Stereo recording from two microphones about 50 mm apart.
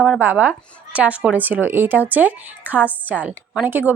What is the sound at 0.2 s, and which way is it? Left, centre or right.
Speech, right.